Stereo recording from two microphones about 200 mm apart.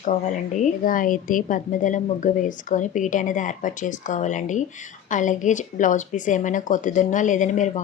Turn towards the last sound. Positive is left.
turn(degrees=40)  # may be behind; listen again after turning